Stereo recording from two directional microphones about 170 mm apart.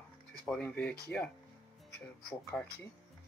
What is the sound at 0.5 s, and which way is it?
Speech, 10° left (ahead or behind).